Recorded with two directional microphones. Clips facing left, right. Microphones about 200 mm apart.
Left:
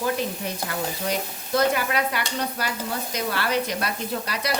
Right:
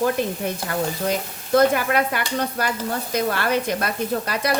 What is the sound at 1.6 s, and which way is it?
Speech, 50° right (ahead or behind).